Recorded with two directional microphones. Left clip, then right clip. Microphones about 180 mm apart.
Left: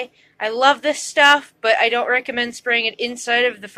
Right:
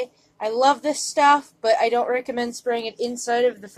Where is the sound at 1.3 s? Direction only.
30° left (ahead or behind).